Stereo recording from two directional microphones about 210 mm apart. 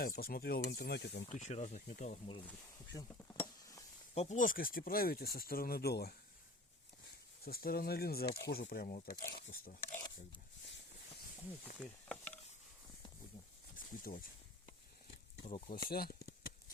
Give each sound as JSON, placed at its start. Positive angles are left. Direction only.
{"t": 0.0, "sound": "speech", "side_deg": 45}
{"t": 1.3, "sound": "speech", "side_deg": 35}
{"t": 2.5, "sound": "cutlery", "side_deg": 15}
{"t": 3.4, "sound": "a sound", "side_deg": 15}
{"t": 4.1, "sound": "speech", "side_deg": 30}
{"t": 7.4, "sound": "speech", "side_deg": 45}
{"t": 8.9, "sound": "speech", "side_deg": 40}
{"t": 9.8, "sound": "speech", "side_deg": 10}
{"t": 11.8, "sound": "a sound", "side_deg": 5}
{"t": 13.7, "sound": "speech", "side_deg": 45}
{"t": 15.4, "sound": "speech", "side_deg": 30}
{"t": 15.7, "sound": "speech", "side_deg": 45}